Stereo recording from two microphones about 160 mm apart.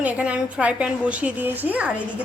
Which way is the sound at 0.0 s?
10° right (ahead or behind).